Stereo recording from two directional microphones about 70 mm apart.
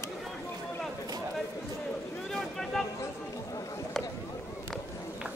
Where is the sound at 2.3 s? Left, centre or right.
Centre.